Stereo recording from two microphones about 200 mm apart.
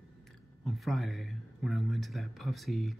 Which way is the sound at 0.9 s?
Centre (ahead or behind).